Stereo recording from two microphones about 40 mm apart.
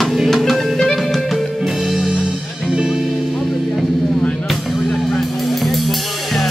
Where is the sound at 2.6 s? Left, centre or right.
Centre.